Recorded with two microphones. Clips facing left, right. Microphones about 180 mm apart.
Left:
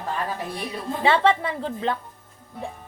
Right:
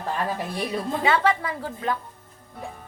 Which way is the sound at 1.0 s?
30° left (ahead or behind).